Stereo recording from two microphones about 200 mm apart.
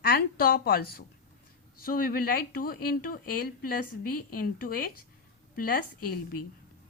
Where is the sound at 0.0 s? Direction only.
50° left (ahead or behind).